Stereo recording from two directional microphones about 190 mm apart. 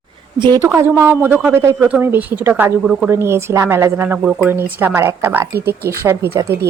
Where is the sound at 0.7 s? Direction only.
10° right (ahead or behind).